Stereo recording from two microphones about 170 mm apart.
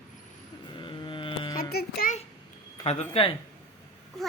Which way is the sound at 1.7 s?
70° left (ahead or behind).